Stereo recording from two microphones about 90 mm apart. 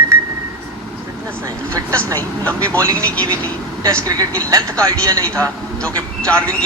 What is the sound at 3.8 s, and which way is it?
Speech, 45° right (ahead or behind).